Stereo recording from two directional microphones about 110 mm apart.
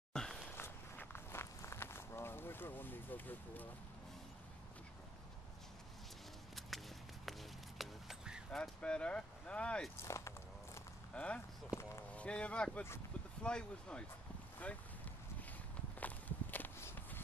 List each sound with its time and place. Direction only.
0.1 s a sound: 5° left (ahead or behind)
0.6 s walk: 20° left (ahead or behind)
7.2 s a sound: centre (ahead or behind)
8.5 s speech: 10° left (ahead or behind)
9.9 s walk: 25° left (ahead or behind)
11.1 s speech: 10° left (ahead or behind)
11.7 s speech: 25° left (ahead or behind)
12.1 s speech: 10° left (ahead or behind)
16.0 s walk: 15° left (ahead or behind)